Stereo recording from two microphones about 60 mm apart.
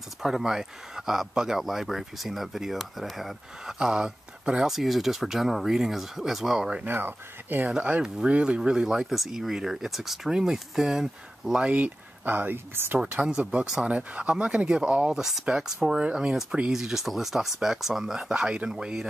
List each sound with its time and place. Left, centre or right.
0.2 s speech: centre
6.8 s speech: right
7.7 s speech: centre
11.6 s speech: right
13.4 s speech: right
16.7 s speech: centre